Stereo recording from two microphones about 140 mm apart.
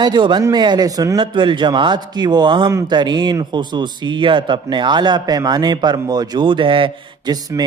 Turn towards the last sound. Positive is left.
turn(degrees=-30)  # may be behind; listen again after turning